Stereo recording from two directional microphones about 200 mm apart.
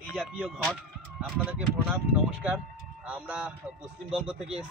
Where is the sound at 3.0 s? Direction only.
5° right (ahead or behind).